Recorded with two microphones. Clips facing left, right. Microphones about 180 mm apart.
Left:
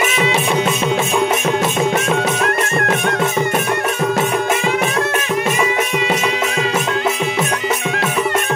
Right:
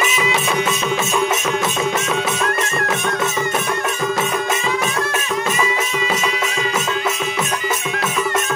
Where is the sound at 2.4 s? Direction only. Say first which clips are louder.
Left 3 dB; 55° left (ahead or behind).